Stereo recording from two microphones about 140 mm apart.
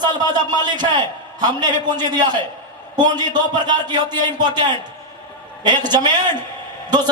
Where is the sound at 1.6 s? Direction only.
30° right (ahead or behind).